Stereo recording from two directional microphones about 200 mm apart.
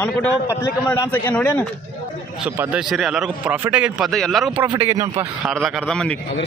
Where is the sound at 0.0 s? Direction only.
10° left (ahead or behind).